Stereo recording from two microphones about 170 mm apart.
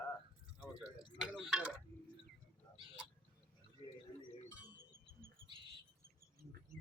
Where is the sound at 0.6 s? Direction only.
5° right (ahead or behind).